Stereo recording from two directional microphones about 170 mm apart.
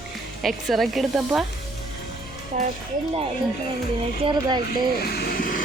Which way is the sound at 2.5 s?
50° right (ahead or behind).